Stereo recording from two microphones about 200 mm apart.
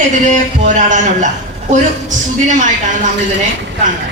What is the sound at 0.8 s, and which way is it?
A woman's voice, 35° right (ahead or behind).